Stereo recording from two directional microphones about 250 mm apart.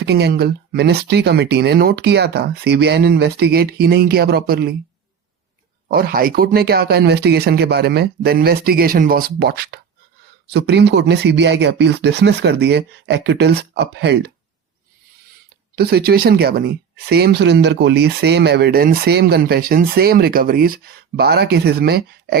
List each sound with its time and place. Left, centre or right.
0.0 s speech: right
5.9 s speech: right
15.7 s speech: right